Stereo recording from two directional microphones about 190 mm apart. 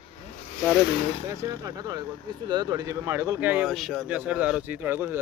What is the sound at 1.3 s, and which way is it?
Speech, 20° right (ahead or behind).